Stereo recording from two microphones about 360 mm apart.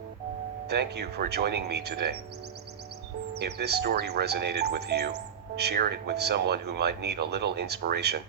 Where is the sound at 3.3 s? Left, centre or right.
Right.